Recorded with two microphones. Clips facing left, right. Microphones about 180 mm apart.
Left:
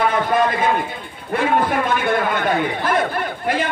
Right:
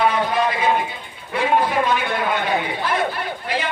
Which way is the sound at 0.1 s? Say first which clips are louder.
Left 2 dB; 50° left (ahead or behind).